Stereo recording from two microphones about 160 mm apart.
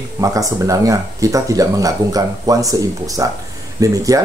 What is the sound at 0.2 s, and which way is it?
Speech, 20° right (ahead or behind).